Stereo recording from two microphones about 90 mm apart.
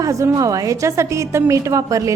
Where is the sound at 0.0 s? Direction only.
40° right (ahead or behind).